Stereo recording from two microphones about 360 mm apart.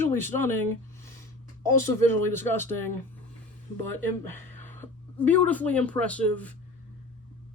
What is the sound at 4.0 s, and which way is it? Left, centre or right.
Speech, centre.